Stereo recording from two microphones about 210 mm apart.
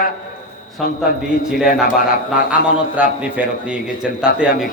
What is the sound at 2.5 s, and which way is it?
A man's voice, 5° right (ahead or behind).